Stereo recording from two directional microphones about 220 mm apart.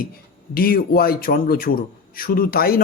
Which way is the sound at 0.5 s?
40° left (ahead or behind).